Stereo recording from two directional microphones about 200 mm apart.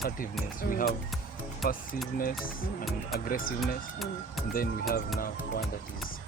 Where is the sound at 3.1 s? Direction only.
45° left (ahead or behind).